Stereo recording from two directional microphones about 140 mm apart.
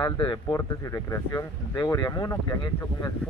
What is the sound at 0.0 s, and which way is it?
Speech, 30° left (ahead or behind).